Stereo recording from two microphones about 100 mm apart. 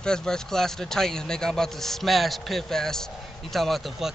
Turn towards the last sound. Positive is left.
turn(degrees=0)  # may be behind; listen again after turning